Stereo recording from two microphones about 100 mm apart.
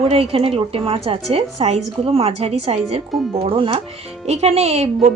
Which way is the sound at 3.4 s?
60° right (ahead or behind).